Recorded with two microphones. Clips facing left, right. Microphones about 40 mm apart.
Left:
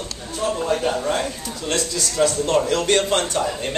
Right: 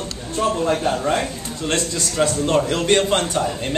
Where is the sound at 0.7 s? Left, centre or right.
Right.